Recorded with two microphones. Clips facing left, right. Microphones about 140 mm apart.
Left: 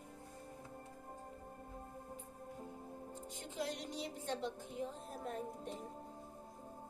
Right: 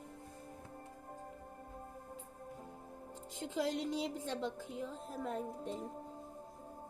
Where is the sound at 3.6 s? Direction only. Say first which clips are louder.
Right 7 dB; 90° right.